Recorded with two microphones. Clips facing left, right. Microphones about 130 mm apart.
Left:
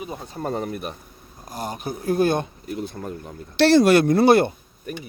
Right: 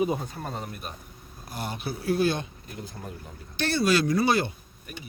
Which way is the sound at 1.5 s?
40° left (ahead or behind).